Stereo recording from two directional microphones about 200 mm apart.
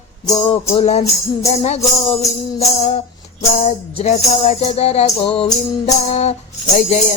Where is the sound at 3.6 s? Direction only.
35° left (ahead or behind).